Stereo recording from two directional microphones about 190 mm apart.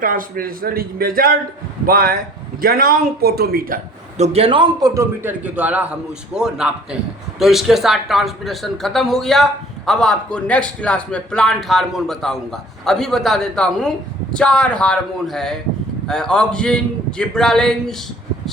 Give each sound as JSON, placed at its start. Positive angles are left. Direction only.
{"t": 0.0, "sound": "a man's voice", "side_deg": -45}
{"t": 4.2, "sound": "a man's voice", "side_deg": -30}